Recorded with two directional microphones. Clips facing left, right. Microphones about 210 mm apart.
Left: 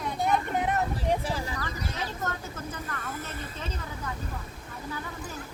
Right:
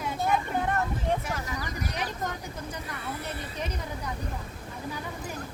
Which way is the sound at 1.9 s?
15° right (ahead or behind).